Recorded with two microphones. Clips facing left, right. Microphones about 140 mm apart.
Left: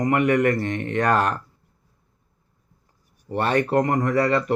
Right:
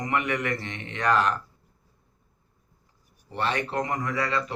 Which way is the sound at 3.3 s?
50° left (ahead or behind).